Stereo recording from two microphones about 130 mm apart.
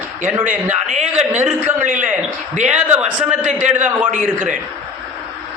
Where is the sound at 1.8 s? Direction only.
80° right.